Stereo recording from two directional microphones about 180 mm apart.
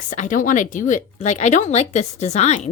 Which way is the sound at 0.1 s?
45° left (ahead or behind).